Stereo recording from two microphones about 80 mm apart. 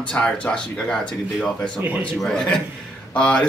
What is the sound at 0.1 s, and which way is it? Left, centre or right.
Speech, centre.